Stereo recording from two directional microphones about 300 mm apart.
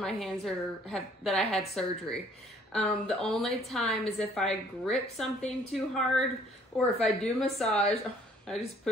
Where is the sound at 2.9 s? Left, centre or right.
Centre.